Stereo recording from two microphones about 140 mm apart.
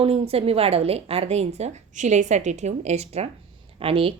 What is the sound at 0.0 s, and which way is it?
A woman's voice, 45° right (ahead or behind).